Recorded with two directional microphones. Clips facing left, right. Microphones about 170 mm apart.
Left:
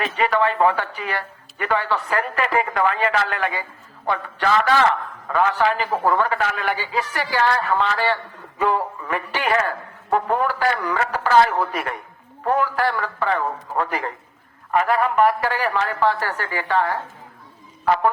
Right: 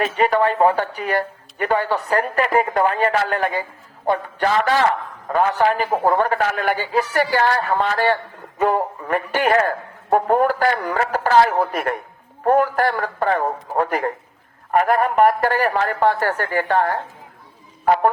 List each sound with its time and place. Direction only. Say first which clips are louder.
0.0 s a man's voice: right 3 dB; 40° right (ahead or behind)